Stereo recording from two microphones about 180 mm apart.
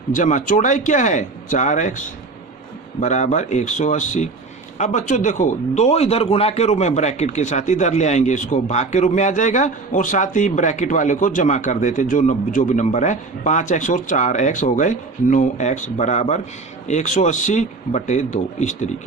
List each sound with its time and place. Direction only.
0.1 s speech: 45° left (ahead or behind)